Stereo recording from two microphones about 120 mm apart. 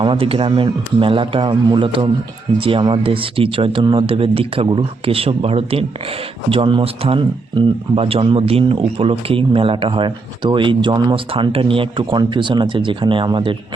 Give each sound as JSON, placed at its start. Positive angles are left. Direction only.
{"t": 0.0, "sound": "speech", "side_deg": -45}